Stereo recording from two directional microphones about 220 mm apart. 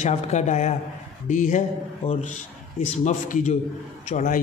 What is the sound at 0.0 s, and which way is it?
A man's voice, 30° left (ahead or behind).